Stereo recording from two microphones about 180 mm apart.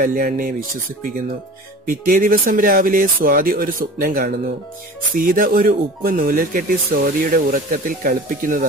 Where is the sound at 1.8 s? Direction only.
50° right (ahead or behind).